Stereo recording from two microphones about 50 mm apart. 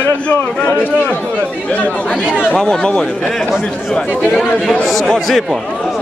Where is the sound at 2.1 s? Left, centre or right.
Centre.